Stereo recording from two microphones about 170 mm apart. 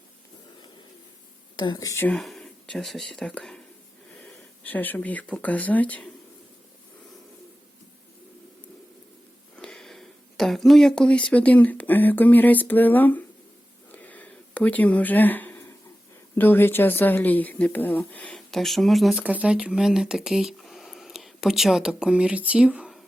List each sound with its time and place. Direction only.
1.5 s speech: 25° left (ahead or behind)
2.1 s speech: centre (ahead or behind)
9.6 s speech: 5° left (ahead or behind)
13.9 s a sound: 10° left (ahead or behind)
16.3 s speech: 10° left (ahead or behind); by 23.0 s 5° right (ahead or behind)